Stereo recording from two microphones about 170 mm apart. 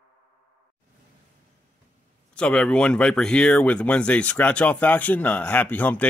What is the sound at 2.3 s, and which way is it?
Speech, 5° left (ahead or behind).